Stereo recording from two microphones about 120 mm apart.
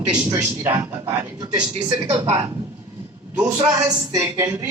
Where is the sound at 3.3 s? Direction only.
30° right (ahead or behind).